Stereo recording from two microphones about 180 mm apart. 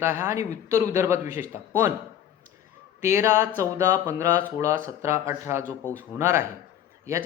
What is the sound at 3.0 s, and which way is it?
Speech, 15° right (ahead or behind).